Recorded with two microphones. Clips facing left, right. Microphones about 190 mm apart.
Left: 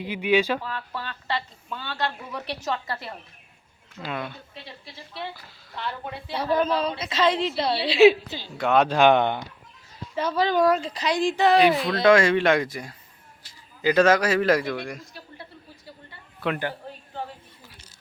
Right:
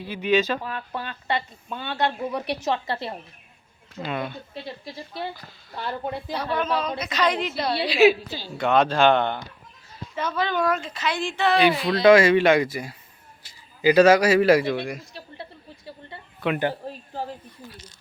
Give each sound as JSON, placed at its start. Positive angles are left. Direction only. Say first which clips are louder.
{"t": 0.0, "sound": "speech", "louder": "even", "side_deg": 15}
{"t": 0.6, "sound": "speech", "louder": "right 2 dB", "side_deg": -15}
{"t": 4.0, "sound": "speech", "louder": "right 3 dB", "side_deg": 0}
{"t": 4.5, "sound": "a woman's voice", "louder": "right 7 dB", "side_deg": -40}
{"t": 6.3, "sound": "a woman's voice", "louder": "left 3 dB", "side_deg": 30}
{"t": 8.5, "sound": "speech", "louder": "even", "side_deg": 5}
{"t": 10.2, "sound": "speech", "louder": "left 3 dB", "side_deg": 35}
{"t": 11.6, "sound": "a man's voice", "louder": "right 1 dB", "side_deg": 0}
{"t": 16.6, "sound": "a woman's voice", "louder": "right 5 dB", "side_deg": -25}